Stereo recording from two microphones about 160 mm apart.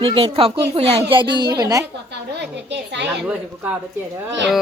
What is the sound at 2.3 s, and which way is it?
Speech, 90° right.